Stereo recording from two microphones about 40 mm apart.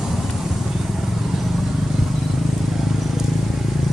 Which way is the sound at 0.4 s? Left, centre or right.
Centre.